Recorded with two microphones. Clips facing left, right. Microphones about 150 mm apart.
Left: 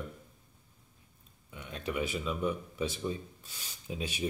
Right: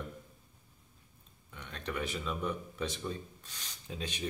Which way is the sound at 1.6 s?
5° left (ahead or behind).